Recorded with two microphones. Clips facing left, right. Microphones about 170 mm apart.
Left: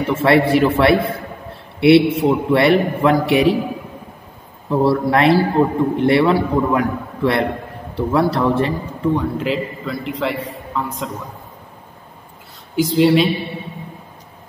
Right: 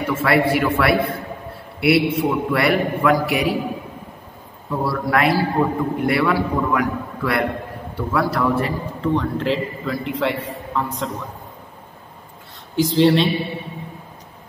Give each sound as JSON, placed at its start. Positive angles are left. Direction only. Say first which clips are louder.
{"t": 0.0, "sound": "a man's voice", "louder": "left 4 dB", "side_deg": 30}
{"t": 4.6, "sound": "a man's voice", "louder": "left 7 dB", "side_deg": 25}
{"t": 9.0, "sound": "a man's voice", "louder": "left 2 dB", "side_deg": 10}
{"t": 12.7, "sound": "a man's voice", "louder": "left 2 dB", "side_deg": 5}